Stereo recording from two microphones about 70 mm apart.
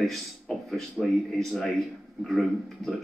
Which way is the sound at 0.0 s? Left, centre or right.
Centre.